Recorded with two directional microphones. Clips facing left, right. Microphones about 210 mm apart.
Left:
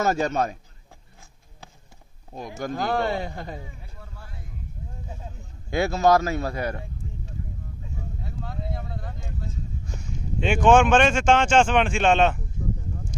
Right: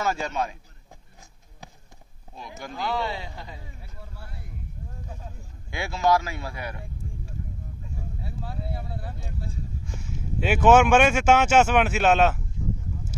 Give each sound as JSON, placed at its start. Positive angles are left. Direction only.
{"t": 0.0, "sound": "speech", "side_deg": 45}
{"t": 2.3, "sound": "speech", "side_deg": 45}
{"t": 5.7, "sound": "speech", "side_deg": 40}
{"t": 8.2, "sound": "a sound", "side_deg": -10}
{"t": 10.1, "sound": "speech", "side_deg": -5}